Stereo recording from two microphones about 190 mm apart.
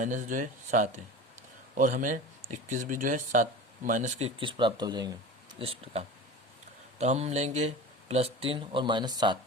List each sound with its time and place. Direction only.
0.0 s speech: 40° right (ahead or behind)
4.4 s speech: 25° right (ahead or behind)